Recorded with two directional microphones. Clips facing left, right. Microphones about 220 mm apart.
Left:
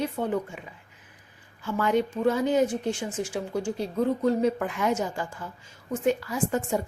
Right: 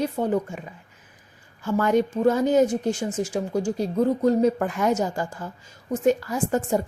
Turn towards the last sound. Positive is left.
turn(degrees=-40)  # may be behind; listen again after turning